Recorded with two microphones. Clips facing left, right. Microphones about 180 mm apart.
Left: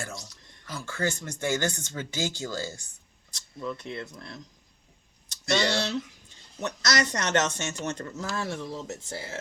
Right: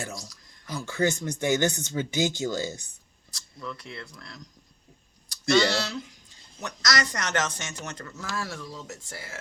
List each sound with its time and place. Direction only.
0.7 s speech: 15° right (ahead or behind)
3.3 s speech: 20° left (ahead or behind)